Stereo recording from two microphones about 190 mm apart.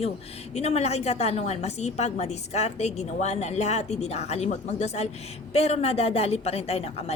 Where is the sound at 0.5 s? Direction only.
35° left (ahead or behind).